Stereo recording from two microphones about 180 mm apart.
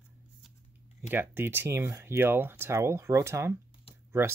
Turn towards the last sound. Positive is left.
turn(degrees=-15)  # may be behind; listen again after turning